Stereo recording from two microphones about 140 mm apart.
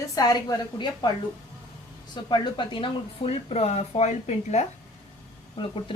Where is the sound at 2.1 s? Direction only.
35° left (ahead or behind); by 4.7 s 55° left (ahead or behind).